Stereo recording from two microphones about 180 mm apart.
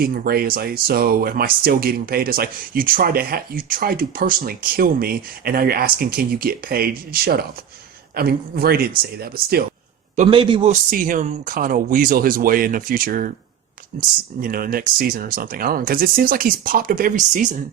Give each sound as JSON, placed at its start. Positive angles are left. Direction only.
{"t": 0.0, "sound": "speech", "side_deg": -55}
{"t": 10.2, "sound": "a man's voice", "side_deg": -30}
{"t": 10.7, "sound": "speech", "side_deg": -50}